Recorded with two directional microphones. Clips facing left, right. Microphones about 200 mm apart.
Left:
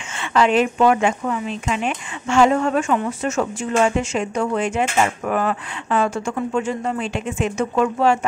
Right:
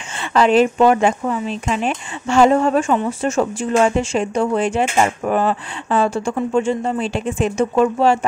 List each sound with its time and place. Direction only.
0.2 s speech: 35° right (ahead or behind)